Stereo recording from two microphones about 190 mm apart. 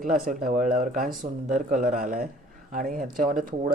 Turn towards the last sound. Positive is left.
turn(degrees=-45)  # may be behind; listen again after turning